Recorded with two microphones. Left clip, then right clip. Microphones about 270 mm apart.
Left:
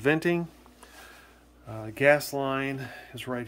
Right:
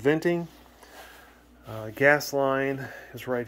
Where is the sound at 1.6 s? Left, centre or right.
Centre.